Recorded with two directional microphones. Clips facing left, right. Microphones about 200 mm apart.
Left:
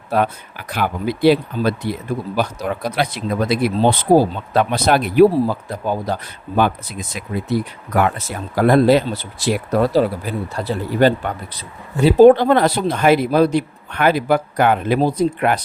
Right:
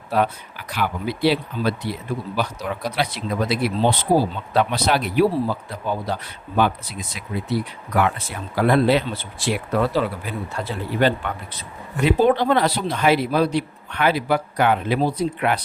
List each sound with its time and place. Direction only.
0.1 s speech: 50° left (ahead or behind)